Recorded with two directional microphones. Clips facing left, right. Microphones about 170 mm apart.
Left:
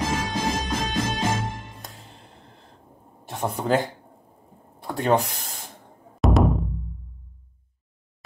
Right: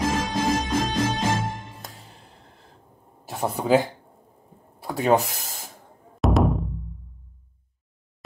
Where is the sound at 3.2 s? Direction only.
5° right (ahead or behind).